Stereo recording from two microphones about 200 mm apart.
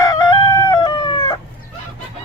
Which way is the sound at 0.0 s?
20° left (ahead or behind).